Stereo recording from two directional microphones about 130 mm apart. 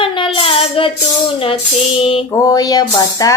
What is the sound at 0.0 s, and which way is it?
Child singing, 45° left (ahead or behind).